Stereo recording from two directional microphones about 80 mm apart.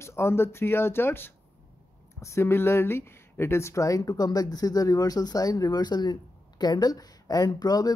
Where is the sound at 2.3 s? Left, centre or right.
Left.